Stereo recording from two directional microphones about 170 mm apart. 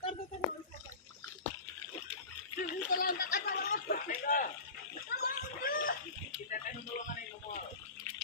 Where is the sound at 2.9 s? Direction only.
55° left (ahead or behind).